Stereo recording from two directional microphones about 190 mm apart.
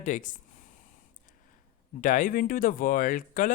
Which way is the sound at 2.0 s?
45° left (ahead or behind).